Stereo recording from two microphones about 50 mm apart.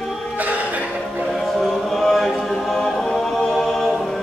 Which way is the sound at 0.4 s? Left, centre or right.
Right.